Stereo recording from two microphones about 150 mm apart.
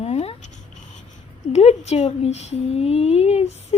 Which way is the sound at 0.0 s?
45° left (ahead or behind).